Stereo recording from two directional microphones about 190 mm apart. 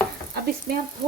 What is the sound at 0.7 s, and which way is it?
Stir, 50° right (ahead or behind).